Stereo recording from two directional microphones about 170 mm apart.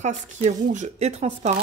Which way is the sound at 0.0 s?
45° right (ahead or behind).